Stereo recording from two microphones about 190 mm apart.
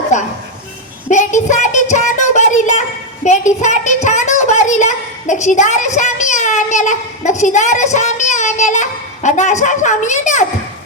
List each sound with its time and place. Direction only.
0.1 s speech: 40° left (ahead or behind)
1.1 s a sound: 40° left (ahead or behind)
3.2 s a woman's voice: 40° left (ahead or behind)